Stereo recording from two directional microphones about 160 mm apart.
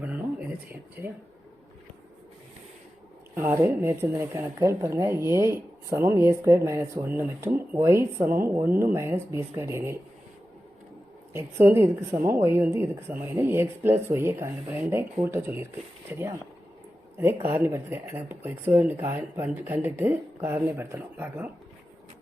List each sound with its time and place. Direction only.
0.0 s a sound: 10° right (ahead or behind)
3.3 s a woman's voice: 15° right (ahead or behind)
11.3 s a woman's voice: 15° right (ahead or behind)
17.4 s a woman's voice: 15° right (ahead or behind)